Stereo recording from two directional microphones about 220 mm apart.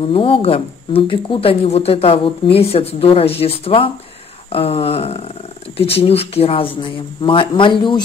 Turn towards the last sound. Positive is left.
turn(degrees=20)  # may be behind; listen again after turning